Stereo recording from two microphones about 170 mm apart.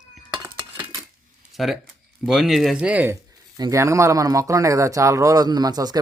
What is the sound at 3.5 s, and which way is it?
Speech, 20° right (ahead or behind).